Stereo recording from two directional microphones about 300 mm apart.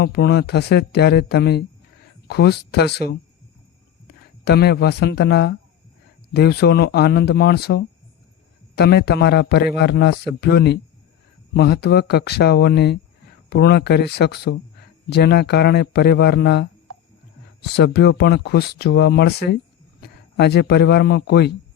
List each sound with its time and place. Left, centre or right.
0.0 s a man's voice: left
4.4 s a man's voice: left